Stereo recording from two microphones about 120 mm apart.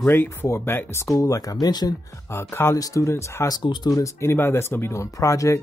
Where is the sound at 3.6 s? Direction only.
40° left (ahead or behind).